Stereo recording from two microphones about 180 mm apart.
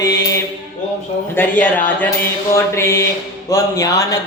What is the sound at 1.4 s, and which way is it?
Speech, 10° left (ahead or behind).